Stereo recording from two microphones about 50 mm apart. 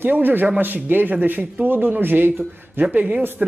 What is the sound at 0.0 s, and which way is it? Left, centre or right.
Speech, right.